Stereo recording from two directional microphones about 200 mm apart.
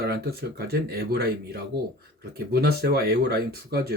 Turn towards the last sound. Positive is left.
turn(degrees=-50)  # may be behind; listen again after turning